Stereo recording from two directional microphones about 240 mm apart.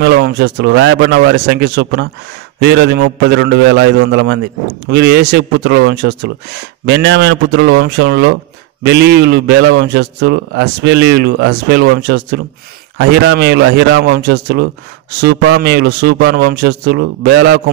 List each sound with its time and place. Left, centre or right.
0.0 s a man's voice: right